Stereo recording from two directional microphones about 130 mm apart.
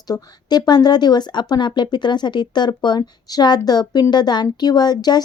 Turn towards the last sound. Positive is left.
turn(degrees=30)  # may be behind; listen again after turning